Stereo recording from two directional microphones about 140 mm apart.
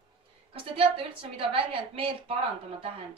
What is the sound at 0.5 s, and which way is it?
A woman's voice, 40° right (ahead or behind).